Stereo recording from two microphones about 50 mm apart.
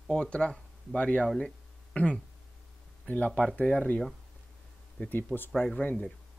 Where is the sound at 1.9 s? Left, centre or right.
Centre.